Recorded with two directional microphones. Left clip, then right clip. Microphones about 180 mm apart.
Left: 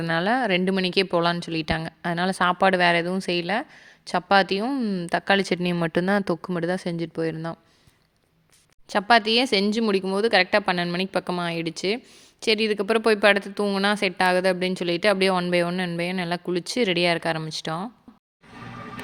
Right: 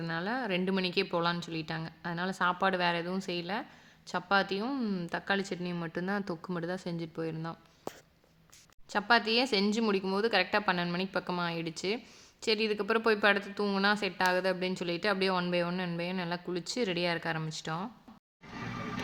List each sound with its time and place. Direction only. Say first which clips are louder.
0.0 s speech: left 12 dB; 45° left (ahead or behind)
8.9 s speech: left 8 dB; 35° left (ahead or behind)